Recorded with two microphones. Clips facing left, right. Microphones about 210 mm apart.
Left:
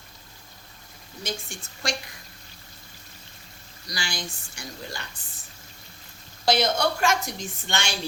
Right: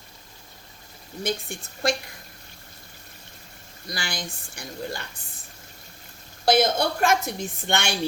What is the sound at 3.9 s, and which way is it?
A woman's voice, 55° right (ahead or behind).